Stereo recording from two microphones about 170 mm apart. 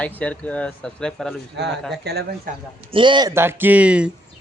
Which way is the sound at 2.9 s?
30° right (ahead or behind).